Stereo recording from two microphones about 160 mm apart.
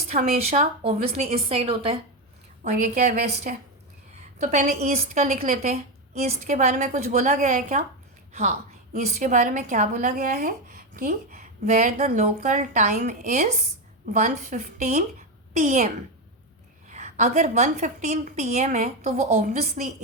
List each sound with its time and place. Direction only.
0.9 s a woman's voice: 40° right (ahead or behind)
2.6 s a woman's voice: 45° right (ahead or behind)
15.5 s speech: 50° right (ahead or behind)
16.9 s speech: 45° right (ahead or behind)